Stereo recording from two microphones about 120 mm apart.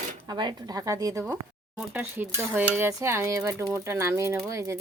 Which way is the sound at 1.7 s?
10° right (ahead or behind).